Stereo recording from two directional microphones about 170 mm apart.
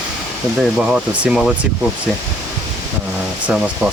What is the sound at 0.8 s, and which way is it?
Speech, 5° right (ahead or behind).